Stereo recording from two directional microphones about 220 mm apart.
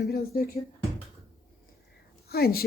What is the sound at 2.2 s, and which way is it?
Speech, 45° left (ahead or behind).